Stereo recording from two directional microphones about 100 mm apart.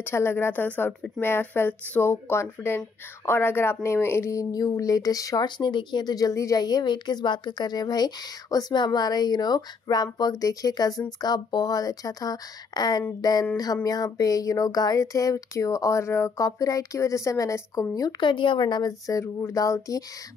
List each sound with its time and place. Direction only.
0.0 s a woman's voice: 25° left (ahead or behind)
18.2 s a woman's voice: 55° left (ahead or behind); by 20.0 s 35° left (ahead or behind)